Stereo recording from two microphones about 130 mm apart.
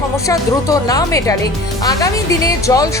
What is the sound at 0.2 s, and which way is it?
Speech, 25° left (ahead or behind).